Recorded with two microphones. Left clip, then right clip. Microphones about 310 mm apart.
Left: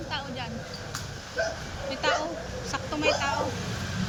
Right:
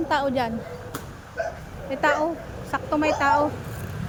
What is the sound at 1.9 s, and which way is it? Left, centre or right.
A woman's voice, centre.